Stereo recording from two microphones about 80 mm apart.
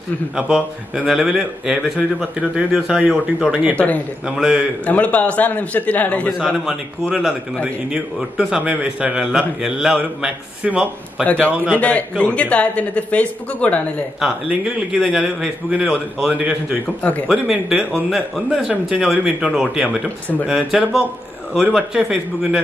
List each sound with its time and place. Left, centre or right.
0.4 s a man's voice: centre
3.7 s a man's voice: centre
4.3 s a man's voice: centre
4.8 s a man's voice: centre
6.3 s a man's voice: centre
11.2 s a man's voice: centre
14.2 s a man's voice: centre